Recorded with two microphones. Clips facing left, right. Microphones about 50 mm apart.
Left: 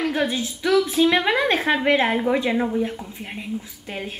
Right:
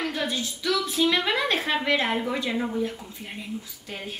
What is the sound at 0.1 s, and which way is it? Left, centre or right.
A woman's voice, left.